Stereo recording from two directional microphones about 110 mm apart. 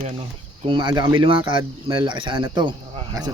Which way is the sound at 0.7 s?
45° right (ahead or behind).